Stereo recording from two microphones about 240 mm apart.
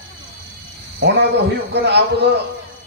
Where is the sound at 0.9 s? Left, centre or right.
Right.